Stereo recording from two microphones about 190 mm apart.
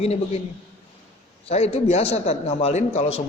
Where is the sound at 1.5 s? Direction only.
35° left (ahead or behind).